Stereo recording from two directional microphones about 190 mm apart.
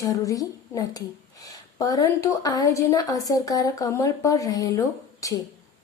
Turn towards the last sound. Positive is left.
turn(degrees=15)  # may be behind; listen again after turning